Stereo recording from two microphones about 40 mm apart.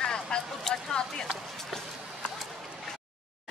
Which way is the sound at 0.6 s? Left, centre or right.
Centre.